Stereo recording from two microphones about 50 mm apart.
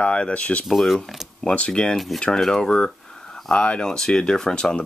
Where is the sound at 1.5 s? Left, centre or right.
Centre.